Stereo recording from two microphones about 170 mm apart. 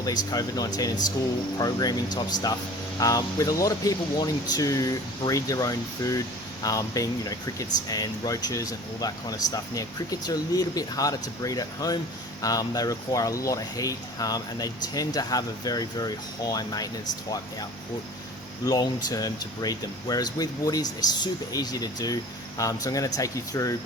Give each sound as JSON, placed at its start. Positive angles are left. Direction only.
{"t": 0.0, "sound": "speech", "side_deg": 20}
{"t": 18.6, "sound": "speech", "side_deg": 25}